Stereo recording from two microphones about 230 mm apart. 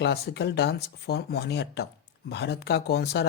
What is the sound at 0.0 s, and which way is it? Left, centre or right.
Speech, left.